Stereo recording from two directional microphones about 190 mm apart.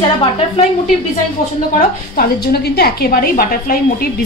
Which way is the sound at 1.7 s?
50° left (ahead or behind).